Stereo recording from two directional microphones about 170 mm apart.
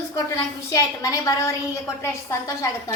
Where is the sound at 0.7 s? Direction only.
20° left (ahead or behind).